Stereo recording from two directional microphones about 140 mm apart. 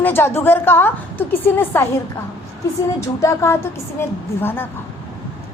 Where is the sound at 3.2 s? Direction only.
20° left (ahead or behind).